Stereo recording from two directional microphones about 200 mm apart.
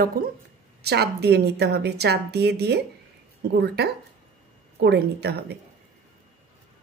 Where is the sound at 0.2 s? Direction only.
50° right (ahead or behind).